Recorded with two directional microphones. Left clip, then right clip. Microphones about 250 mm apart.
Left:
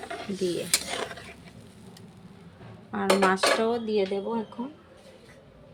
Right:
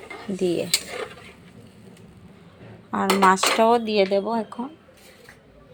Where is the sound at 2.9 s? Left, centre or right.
Centre.